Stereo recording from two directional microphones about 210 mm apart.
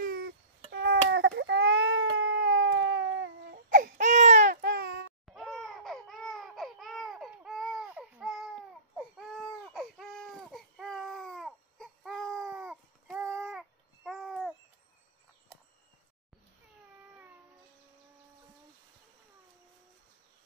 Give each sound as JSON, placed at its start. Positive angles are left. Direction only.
{"t": 0.0, "sound": "baby cry", "side_deg": -45}
{"t": 3.5, "sound": "baby cry", "side_deg": -40}
{"t": 5.2, "sound": "laughter", "side_deg": 0}
{"t": 9.4, "sound": "baby cry", "side_deg": 0}
{"t": 13.4, "sound": "babbling", "side_deg": 0}